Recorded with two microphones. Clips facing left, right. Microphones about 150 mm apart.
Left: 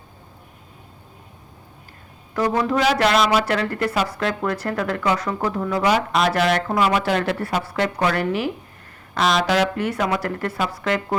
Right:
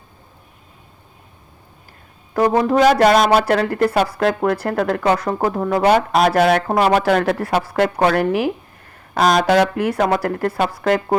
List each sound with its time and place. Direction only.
2.3 s speech: 45° right (ahead or behind)
3.9 s speech: 50° right (ahead or behind)
6.7 s speech: 40° right (ahead or behind)